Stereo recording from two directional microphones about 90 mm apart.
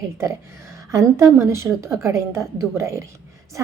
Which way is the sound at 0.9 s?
35° right (ahead or behind).